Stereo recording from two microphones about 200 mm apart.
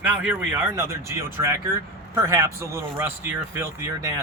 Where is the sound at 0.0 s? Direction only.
10° right (ahead or behind).